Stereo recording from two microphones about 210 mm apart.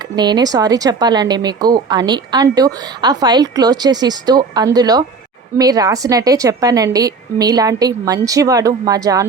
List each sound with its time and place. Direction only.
0.2 s a woman's voice: 20° right (ahead or behind)